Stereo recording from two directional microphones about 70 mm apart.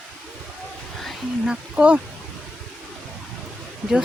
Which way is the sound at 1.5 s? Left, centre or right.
Centre.